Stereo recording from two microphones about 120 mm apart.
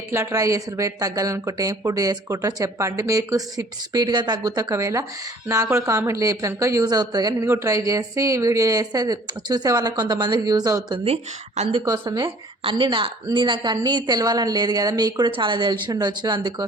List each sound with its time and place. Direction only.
0.1 s speech: 25° right (ahead or behind)
7.4 s speech: 20° right (ahead or behind)
10.9 s a woman's voice: 60° right (ahead or behind)
11.7 s a woman's voice: 35° right (ahead or behind)